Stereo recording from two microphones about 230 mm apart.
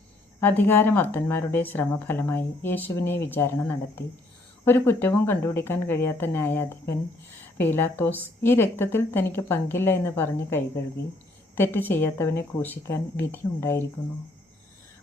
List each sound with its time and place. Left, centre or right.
0.3 s speech: centre